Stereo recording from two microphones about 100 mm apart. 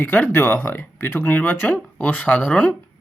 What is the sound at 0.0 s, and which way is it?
Speech, 20° left (ahead or behind).